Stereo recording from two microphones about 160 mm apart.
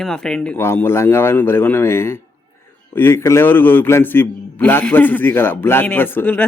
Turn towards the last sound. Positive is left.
turn(degrees=10)  # may be behind; listen again after turning